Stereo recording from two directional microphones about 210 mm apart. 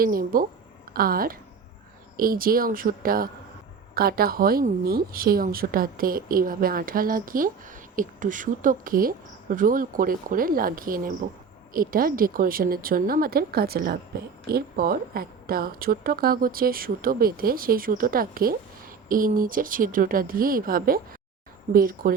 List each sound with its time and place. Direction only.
0.0 s speech: 45° right (ahead or behind)